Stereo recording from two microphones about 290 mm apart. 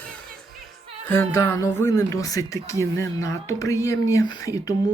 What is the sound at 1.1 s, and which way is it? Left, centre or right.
Speech, centre.